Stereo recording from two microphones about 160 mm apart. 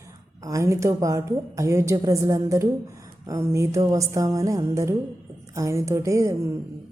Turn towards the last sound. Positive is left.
turn(degrees=-20)  # may be behind; listen again after turning